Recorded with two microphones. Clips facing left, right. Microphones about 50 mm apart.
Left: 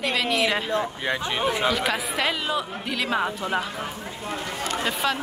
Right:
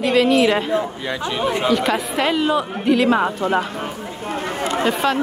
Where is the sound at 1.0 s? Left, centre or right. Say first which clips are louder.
Right 2 dB; left.